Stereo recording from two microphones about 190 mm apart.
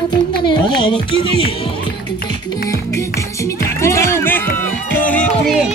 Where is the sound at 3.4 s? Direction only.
15° left (ahead or behind).